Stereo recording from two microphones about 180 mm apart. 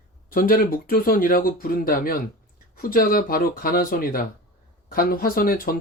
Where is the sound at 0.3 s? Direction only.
50° left (ahead or behind).